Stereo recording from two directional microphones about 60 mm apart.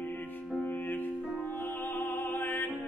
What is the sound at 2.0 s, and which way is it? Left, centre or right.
Music, left.